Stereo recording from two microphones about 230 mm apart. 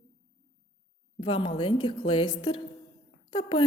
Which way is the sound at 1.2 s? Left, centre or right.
Left.